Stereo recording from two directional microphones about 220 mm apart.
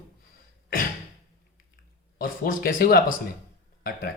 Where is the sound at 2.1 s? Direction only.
40° left (ahead or behind).